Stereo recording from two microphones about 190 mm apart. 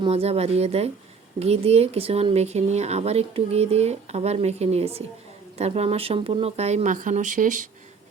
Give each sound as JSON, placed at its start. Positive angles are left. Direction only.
{"t": 0.0, "sound": "speech", "side_deg": -30}